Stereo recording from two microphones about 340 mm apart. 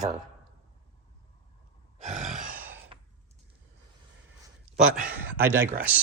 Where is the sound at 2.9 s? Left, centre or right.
Centre.